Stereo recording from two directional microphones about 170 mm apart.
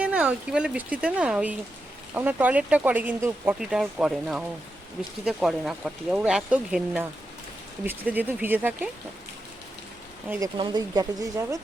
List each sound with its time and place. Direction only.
0.0 s speech: 5° right (ahead or behind)
3.6 s speech: 5° right (ahead or behind)
10.4 s speech: 20° right (ahead or behind)